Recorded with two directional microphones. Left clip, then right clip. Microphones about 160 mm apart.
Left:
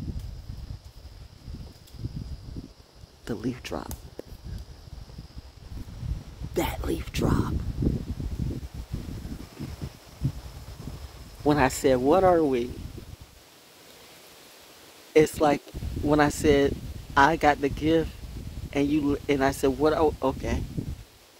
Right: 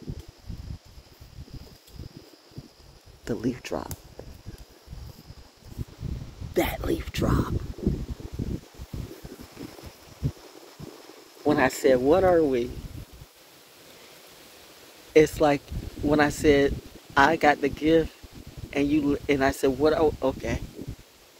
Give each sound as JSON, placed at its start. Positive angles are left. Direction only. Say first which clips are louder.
{"t": 3.3, "sound": "speech", "louder": "right 3 dB", "side_deg": 5}
{"t": 6.5, "sound": "speech", "louder": "right 3 dB", "side_deg": 15}
{"t": 11.4, "sound": "speech", "louder": "right 1 dB", "side_deg": 20}
{"t": 15.1, "sound": "speech", "louder": "right 1 dB", "side_deg": 20}